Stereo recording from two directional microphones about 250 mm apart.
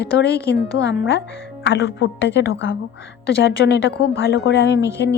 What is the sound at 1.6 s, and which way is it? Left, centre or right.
A woman's voice, left.